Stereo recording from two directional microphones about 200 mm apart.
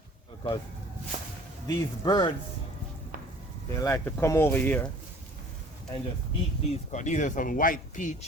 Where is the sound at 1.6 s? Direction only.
20° left (ahead or behind).